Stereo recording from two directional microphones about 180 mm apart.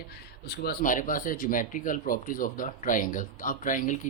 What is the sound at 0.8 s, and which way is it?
Speech, 45° left (ahead or behind).